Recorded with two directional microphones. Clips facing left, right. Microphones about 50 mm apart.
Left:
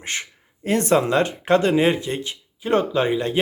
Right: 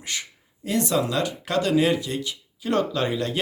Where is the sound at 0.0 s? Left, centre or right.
Left.